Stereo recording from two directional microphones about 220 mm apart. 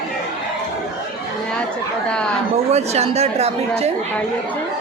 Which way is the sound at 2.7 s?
30° right (ahead or behind).